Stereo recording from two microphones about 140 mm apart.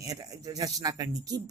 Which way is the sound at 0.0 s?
25° right (ahead or behind).